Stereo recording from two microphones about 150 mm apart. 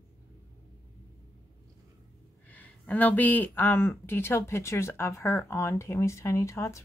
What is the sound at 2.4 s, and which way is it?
Speech, 10° left (ahead or behind).